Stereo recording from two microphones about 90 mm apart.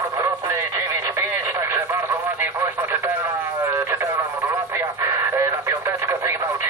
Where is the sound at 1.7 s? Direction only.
30° right (ahead or behind).